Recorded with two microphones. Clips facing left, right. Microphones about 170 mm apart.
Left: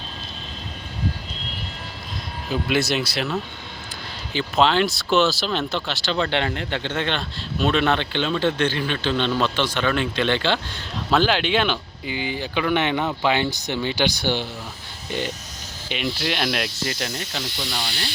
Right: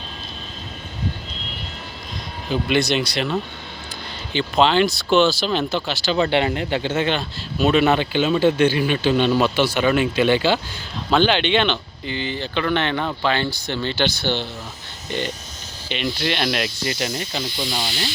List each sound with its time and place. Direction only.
2.5 s speech: centre (ahead or behind)
15.9 s speech: 5° left (ahead or behind)